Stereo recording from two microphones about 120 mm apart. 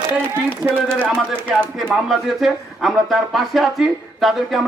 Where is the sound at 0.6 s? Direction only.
10° right (ahead or behind).